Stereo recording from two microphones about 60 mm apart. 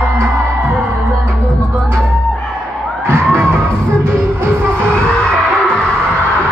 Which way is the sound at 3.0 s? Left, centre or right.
Right.